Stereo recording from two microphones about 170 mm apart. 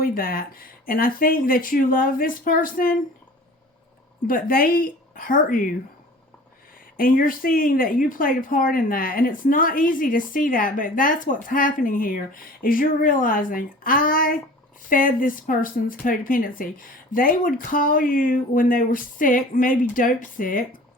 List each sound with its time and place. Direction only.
0.0 s speech: 60° left (ahead or behind)
4.3 s speech: 55° left (ahead or behind)
6.9 s speech: 55° left (ahead or behind)